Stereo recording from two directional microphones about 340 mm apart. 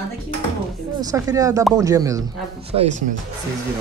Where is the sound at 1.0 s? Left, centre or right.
Centre.